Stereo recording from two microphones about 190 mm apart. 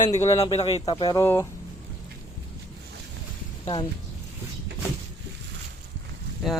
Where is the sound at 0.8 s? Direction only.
20° left (ahead or behind).